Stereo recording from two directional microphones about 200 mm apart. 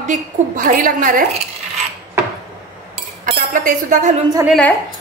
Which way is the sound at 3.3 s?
40° right (ahead or behind).